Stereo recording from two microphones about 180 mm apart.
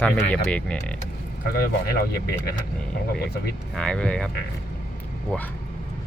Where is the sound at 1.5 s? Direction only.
60° left (ahead or behind).